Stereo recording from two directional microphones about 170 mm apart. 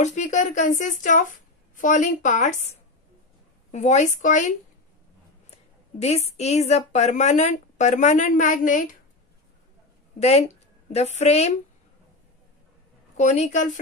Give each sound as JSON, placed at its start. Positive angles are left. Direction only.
{"t": 0.0, "sound": "a woman's voice", "side_deg": 45}
{"t": 5.9, "sound": "a woman's voice", "side_deg": 40}
{"t": 10.1, "sound": "a woman's voice", "side_deg": 40}
{"t": 13.2, "sound": "a woman's voice", "side_deg": 45}